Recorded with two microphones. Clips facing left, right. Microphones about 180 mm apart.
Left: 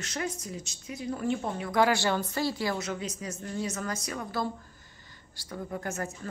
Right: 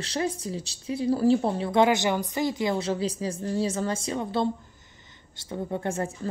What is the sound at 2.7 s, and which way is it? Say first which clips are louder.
A woman's voice: right 7 dB; 30° right (ahead or behind).